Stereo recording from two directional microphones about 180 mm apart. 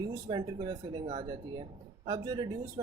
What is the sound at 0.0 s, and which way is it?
Speech, 20° right (ahead or behind).